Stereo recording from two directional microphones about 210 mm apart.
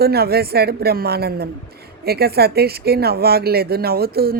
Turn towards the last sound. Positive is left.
turn(degrees=-45)  # may be behind; listen again after turning